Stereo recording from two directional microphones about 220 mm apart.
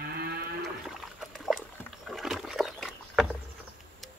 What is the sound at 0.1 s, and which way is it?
Moo, 45° right (ahead or behind).